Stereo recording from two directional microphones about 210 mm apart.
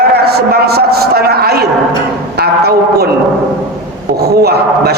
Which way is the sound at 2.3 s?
50° right (ahead or behind).